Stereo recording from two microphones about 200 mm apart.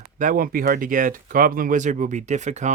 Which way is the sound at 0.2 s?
45° right (ahead or behind).